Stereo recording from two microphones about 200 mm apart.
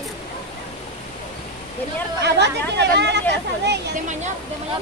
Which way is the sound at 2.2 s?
60° right (ahead or behind).